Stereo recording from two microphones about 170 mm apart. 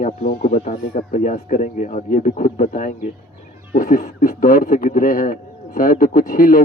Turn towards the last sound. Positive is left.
turn(degrees=55)  # may be behind; listen again after turning